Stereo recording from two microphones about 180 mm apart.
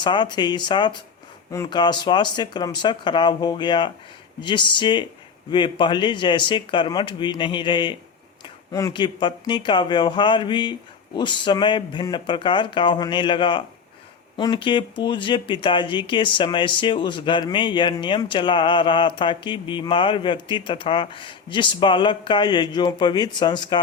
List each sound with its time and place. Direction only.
0.0 s speech: 25° left (ahead or behind)